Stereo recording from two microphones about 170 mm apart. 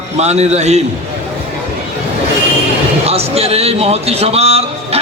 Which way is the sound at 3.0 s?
35° right (ahead or behind).